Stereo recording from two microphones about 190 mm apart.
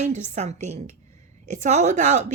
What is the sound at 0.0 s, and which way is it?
A woman's voice, 35° right (ahead or behind).